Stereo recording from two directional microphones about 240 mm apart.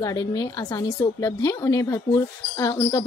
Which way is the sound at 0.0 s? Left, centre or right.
Centre.